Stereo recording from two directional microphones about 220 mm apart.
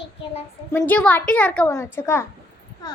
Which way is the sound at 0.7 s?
5° left (ahead or behind).